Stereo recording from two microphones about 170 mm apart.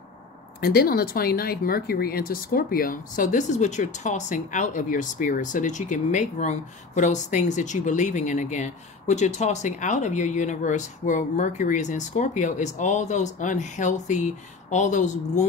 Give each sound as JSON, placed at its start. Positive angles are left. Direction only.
{"t": 0.6, "sound": "speech", "side_deg": 65}